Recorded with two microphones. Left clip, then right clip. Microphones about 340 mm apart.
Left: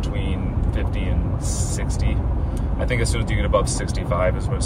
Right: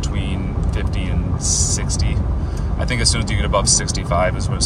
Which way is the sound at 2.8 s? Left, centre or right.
Centre.